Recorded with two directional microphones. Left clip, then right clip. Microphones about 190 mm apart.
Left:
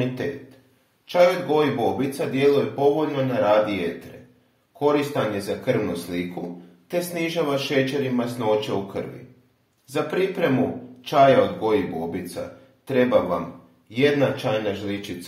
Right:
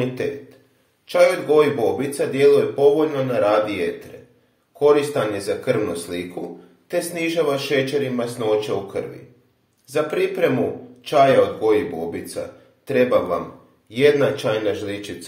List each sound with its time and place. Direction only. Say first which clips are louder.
0.0 s speech: right 3 dB; 20° right (ahead or behind)